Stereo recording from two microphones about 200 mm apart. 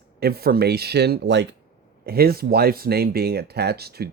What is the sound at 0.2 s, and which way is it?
Speech, 50° right (ahead or behind).